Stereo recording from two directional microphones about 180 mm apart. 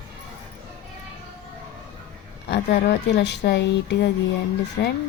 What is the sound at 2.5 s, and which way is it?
Speech, 70° left (ahead or behind).